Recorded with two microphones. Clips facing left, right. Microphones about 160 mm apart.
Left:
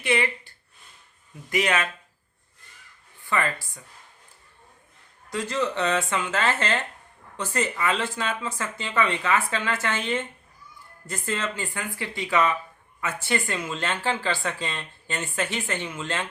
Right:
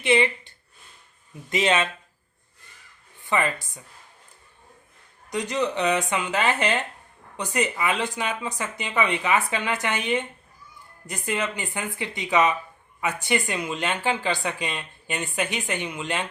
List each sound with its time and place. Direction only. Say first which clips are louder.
0.0 s speech: right 4 dB; 20° right (ahead or behind)
3.2 s speech: right 2 dB; 20° right (ahead or behind)
5.3 s speech: right 1 dB; 20° right (ahead or behind)